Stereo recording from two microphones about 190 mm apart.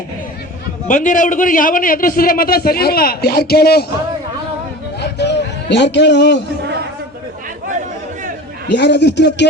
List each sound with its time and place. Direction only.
0.9 s a man's voice: 45° left (ahead or behind)
4.9 s a sound: 60° left (ahead or behind)
8.7 s speech: 65° left (ahead or behind)